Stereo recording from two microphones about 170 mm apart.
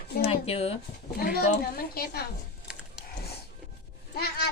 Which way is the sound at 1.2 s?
60° left (ahead or behind).